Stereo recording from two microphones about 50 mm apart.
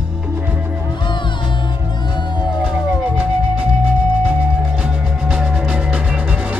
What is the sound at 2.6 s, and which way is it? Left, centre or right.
Music, centre.